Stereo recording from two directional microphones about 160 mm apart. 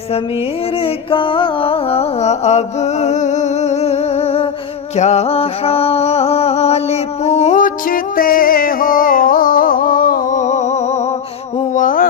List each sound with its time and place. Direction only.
0.8 s music: 35° left (ahead or behind)
4.9 s a sound: 45° left (ahead or behind)
11.7 s music: 55° left (ahead or behind)